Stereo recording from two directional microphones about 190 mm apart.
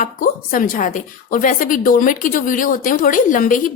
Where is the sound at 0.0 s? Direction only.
45° left (ahead or behind).